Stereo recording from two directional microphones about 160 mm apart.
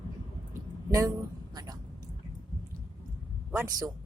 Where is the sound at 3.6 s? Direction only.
20° right (ahead or behind).